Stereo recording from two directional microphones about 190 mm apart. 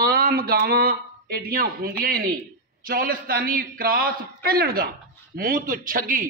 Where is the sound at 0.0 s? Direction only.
50° right (ahead or behind).